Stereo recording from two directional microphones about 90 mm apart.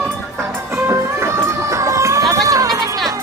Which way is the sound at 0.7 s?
30° right (ahead or behind).